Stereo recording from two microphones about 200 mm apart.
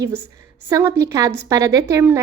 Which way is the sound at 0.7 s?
15° right (ahead or behind).